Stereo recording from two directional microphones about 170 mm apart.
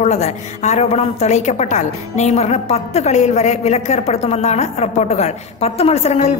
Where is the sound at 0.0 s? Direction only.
40° left (ahead or behind).